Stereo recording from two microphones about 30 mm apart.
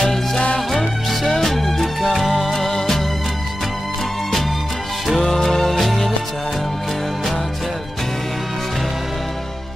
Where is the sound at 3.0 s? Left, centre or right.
Centre.